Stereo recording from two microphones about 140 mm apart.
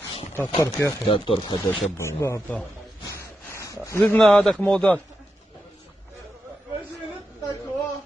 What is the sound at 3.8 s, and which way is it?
Speech, 15° left (ahead or behind).